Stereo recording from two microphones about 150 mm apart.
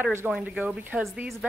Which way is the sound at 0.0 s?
15° right (ahead or behind).